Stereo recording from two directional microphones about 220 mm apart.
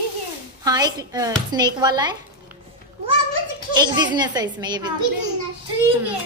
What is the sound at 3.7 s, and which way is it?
A child's voice, 20° right (ahead or behind).